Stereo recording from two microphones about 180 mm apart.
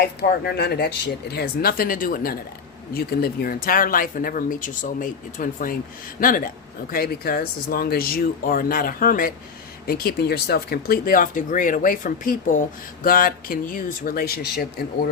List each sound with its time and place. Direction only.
0.0 s speech: 60° left (ahead or behind)